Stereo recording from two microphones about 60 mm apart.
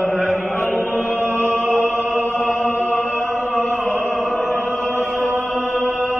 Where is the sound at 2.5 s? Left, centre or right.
Left.